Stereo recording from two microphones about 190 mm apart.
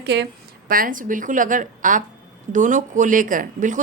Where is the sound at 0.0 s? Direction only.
60° right (ahead or behind).